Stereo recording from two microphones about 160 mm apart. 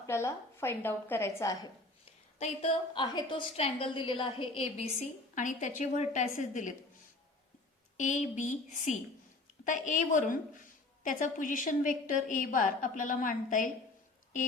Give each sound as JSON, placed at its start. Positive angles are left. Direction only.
{"t": 0.0, "sound": "a woman's voice", "side_deg": 15}
{"t": 2.4, "sound": "a woman's voice", "side_deg": 35}
{"t": 4.9, "sound": "a woman's voice", "side_deg": 50}
{"t": 7.9, "sound": "a woman's voice", "side_deg": 50}